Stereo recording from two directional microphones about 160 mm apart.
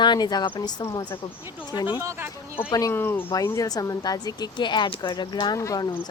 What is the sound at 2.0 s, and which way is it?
Speech, 20° right (ahead or behind).